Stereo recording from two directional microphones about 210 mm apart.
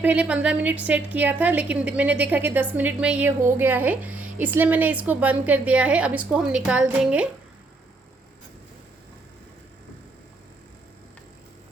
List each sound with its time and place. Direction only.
0.0 s a woman's voice: 5° right (ahead or behind)